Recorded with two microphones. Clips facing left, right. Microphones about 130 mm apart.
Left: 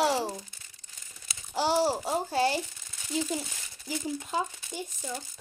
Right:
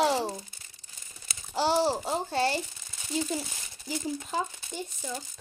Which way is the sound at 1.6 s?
10° left (ahead or behind).